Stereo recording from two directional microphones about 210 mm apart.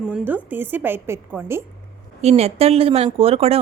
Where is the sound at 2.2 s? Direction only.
30° right (ahead or behind).